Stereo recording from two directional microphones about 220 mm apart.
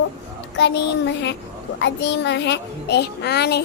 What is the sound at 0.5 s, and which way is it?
A child's voice, 50° left (ahead or behind).